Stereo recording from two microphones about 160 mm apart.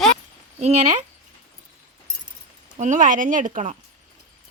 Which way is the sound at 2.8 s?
50° right (ahead or behind).